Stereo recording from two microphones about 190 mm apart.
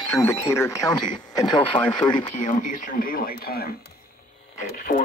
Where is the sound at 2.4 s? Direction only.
40° left (ahead or behind).